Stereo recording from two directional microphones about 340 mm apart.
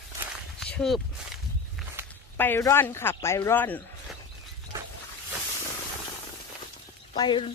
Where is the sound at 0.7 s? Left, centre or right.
Centre.